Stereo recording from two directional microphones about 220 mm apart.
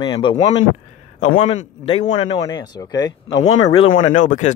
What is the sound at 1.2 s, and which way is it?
A man's voice, 35° left (ahead or behind).